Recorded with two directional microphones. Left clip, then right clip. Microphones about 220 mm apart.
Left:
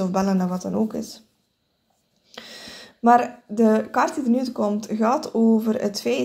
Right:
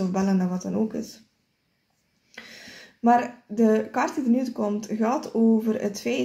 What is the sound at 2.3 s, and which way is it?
Speech, 20° left (ahead or behind).